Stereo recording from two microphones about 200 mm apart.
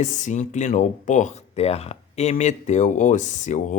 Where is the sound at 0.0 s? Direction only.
40° left (ahead or behind).